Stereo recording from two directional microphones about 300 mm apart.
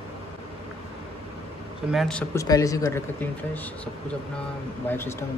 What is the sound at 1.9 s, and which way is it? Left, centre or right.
Speech, centre.